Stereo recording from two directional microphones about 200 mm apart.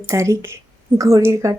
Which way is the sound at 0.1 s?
15° right (ahead or behind).